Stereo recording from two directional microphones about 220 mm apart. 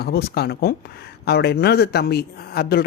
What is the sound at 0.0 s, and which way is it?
Speech, 45° left (ahead or behind).